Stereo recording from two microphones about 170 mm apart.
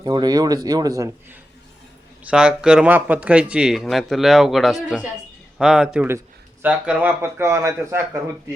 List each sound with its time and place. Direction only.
0.0 s speech: 25° right (ahead or behind)
2.2 s speech: 5° right (ahead or behind)